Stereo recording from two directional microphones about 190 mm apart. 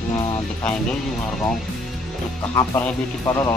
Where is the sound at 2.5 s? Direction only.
15° left (ahead or behind).